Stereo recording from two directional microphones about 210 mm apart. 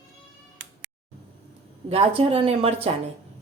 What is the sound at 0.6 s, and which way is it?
Cat, 60° right (ahead or behind).